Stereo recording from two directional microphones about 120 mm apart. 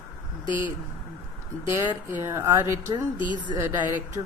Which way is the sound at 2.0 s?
20° right (ahead or behind).